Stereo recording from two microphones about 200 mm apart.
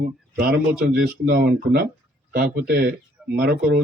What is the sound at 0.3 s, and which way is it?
Speech, 50° right (ahead or behind).